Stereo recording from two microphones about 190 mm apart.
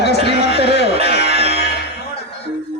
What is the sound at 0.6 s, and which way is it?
Music, 60° left (ahead or behind).